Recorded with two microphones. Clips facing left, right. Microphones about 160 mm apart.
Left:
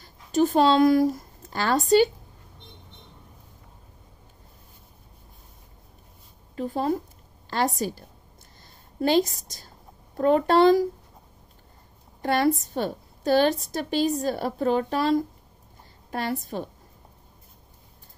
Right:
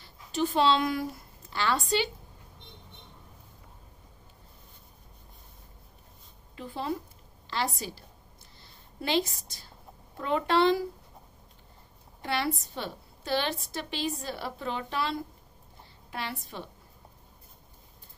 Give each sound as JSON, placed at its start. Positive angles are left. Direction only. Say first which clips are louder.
{"t": 0.0, "sound": "speech", "louder": "left 8 dB", "side_deg": 45}
{"t": 6.5, "sound": "a woman's voice", "louder": "left 8 dB", "side_deg": 45}
{"t": 9.0, "sound": "a woman's voice", "louder": "left 7 dB", "side_deg": 45}
{"t": 12.2, "sound": "a woman's voice", "louder": "left 9 dB", "side_deg": 45}